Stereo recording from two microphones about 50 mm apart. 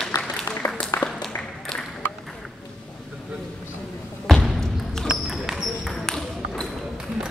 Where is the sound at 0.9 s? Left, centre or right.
Left.